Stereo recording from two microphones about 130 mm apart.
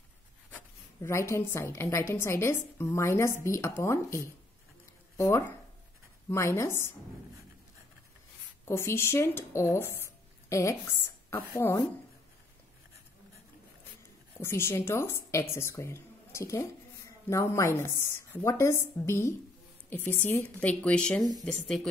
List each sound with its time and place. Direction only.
1.0 s a woman's voice: 20° left (ahead or behind)
8.6 s a woman's voice: 20° left (ahead or behind)
14.4 s a woman's voice: 20° left (ahead or behind)